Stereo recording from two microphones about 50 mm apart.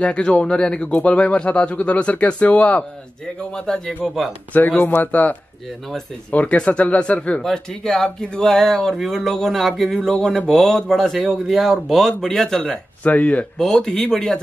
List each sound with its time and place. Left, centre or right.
0.0 s speech: left
3.5 s speech: centre
4.0 s speech: centre
4.6 s a man's voice: left
6.3 s speech: left
7.4 s speech: centre
13.0 s speech: left
13.6 s speech: centre